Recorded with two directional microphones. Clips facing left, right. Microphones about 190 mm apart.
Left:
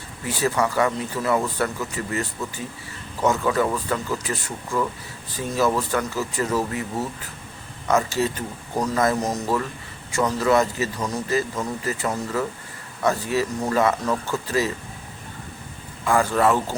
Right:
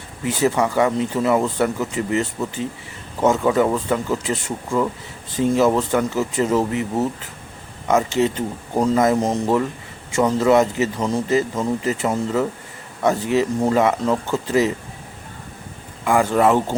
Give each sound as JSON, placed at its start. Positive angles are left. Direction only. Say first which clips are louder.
{"t": 0.3, "sound": "speech", "louder": "right 4 dB", "side_deg": -20}
{"t": 16.0, "sound": "speech", "louder": "right 3 dB", "side_deg": -20}